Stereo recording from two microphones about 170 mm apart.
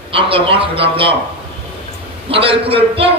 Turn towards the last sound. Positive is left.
turn(degrees=-35)  # may be behind; listen again after turning